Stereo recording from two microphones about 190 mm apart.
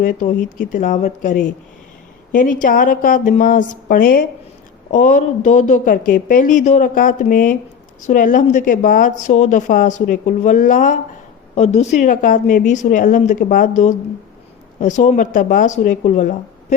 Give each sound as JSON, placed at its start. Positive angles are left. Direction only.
{"t": 0.0, "sound": "a woman's voice", "side_deg": 45}